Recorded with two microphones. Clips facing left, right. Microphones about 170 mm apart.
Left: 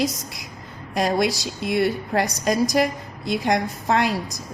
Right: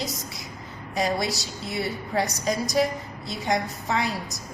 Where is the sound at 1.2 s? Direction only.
90° left.